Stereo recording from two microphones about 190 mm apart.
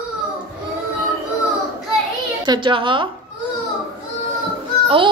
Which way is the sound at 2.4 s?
25° right (ahead or behind).